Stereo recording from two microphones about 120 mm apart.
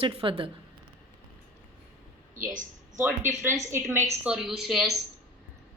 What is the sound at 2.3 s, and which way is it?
Speech, 90° right.